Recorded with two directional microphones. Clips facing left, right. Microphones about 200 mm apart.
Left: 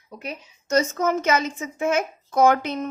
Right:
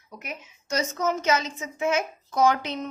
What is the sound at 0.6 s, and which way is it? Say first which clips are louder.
A woman's voice: left 5 dB; 50° left (ahead or behind).